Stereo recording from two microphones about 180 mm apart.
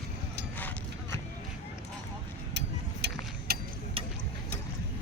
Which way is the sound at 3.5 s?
55° right (ahead or behind).